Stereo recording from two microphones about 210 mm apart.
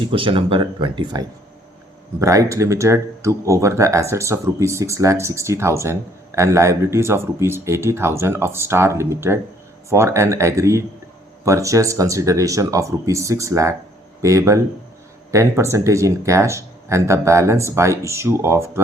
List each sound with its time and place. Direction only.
0.0 s speech: 25° right (ahead or behind)